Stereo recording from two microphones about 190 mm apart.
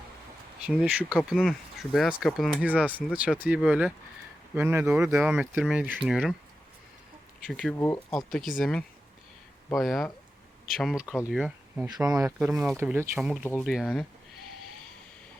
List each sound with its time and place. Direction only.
0.6 s speech: 5° right (ahead or behind)
7.4 s speech: centre (ahead or behind)
12.0 s speech: 20° right (ahead or behind)
12.5 s speech: 5° right (ahead or behind)